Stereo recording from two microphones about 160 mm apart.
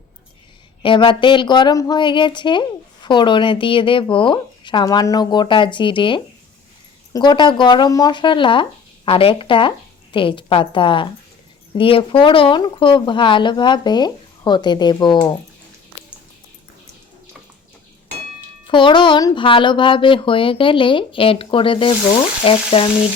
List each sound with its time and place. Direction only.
0.8 s a woman's voice: 30° left (ahead or behind)
18.7 s speech: 30° left (ahead or behind)